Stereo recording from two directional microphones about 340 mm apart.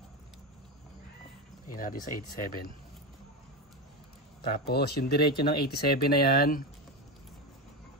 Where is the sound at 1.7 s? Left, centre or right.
Left.